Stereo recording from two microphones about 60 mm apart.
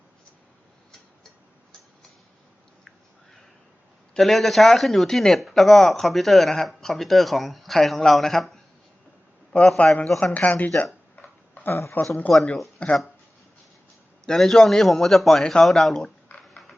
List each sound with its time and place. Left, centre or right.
4.2 s speech: centre
9.5 s a man's voice: centre
10.3 s speech: left
11.2 s tick-tock: left
11.7 s speech: left
12.3 s speech: centre
12.8 s speech: centre
14.3 s a man's voice: centre